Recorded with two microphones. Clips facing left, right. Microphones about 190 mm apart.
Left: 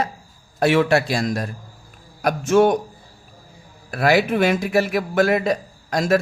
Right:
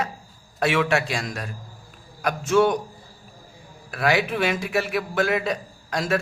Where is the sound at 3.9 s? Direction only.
40° left (ahead or behind).